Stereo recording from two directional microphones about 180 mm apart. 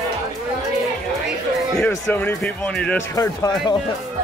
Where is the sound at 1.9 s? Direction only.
10° left (ahead or behind).